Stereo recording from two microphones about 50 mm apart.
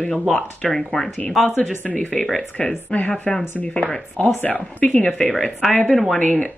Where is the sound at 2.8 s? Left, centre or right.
Left.